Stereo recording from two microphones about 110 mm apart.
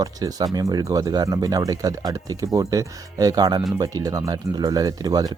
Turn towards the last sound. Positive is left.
turn(degrees=-35)  # may be behind; listen again after turning